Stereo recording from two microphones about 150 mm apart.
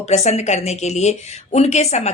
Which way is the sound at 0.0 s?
45° left (ahead or behind).